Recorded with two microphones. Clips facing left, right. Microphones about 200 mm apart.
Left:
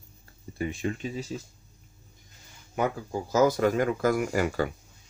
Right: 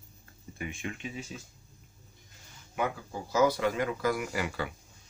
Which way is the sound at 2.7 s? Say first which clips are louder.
Left 5 dB; 45° left (ahead or behind).